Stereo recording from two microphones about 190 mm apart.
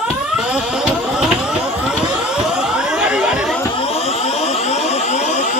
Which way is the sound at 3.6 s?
25° left (ahead or behind).